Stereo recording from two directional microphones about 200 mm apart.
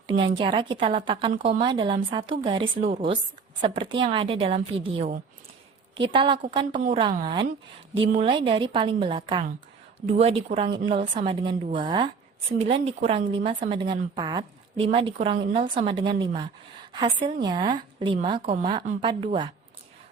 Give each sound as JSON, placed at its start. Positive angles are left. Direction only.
{"t": 0.1, "sound": "a woman's voice", "side_deg": -25}
{"t": 8.4, "sound": "a woman's voice", "side_deg": -25}